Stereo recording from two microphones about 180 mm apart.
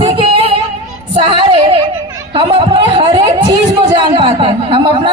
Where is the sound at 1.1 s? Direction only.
30° right (ahead or behind).